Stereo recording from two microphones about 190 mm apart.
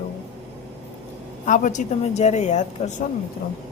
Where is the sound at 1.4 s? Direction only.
40° left (ahead or behind).